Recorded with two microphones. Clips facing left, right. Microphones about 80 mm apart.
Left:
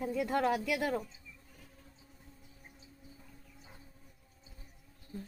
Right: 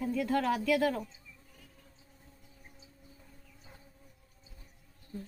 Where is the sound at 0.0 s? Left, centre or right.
Centre.